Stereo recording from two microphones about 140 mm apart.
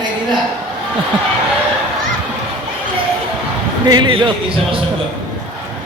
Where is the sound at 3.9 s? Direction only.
35° right (ahead or behind).